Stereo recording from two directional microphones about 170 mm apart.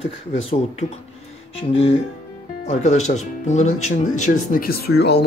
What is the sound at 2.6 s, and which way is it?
Speech, 40° left (ahead or behind).